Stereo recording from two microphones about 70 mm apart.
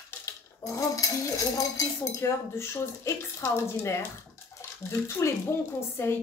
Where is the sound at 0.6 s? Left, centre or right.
Left.